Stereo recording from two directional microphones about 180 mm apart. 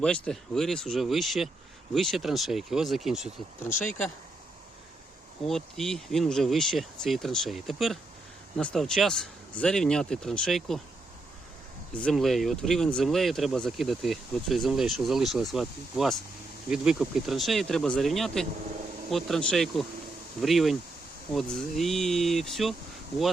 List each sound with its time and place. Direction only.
0.0 s speech: 5° left (ahead or behind)
3.7 s speech: 45° left (ahead or behind)
5.5 s speech: centre (ahead or behind)
11.9 s speech: 5° left (ahead or behind)